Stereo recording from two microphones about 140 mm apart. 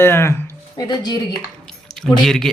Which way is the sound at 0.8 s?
30° left (ahead or behind).